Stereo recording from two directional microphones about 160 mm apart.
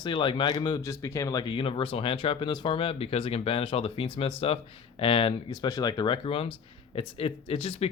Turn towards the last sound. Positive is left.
turn(degrees=40)  # may be behind; listen again after turning